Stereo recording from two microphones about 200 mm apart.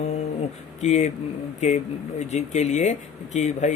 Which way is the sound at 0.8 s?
35° left (ahead or behind).